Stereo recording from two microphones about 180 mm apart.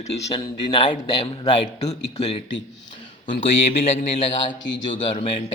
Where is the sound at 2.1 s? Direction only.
35° left (ahead or behind).